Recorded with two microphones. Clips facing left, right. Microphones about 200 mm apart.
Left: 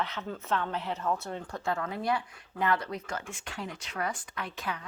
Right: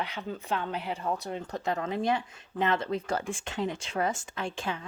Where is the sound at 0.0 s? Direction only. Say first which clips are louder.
Even; 15° right (ahead or behind).